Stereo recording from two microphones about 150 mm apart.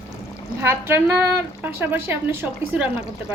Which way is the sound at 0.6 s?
15° right (ahead or behind).